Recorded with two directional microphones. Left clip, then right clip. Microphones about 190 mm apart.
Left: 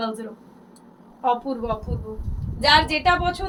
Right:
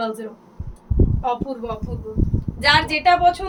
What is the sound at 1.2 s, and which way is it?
A woman's voice, 20° right (ahead or behind).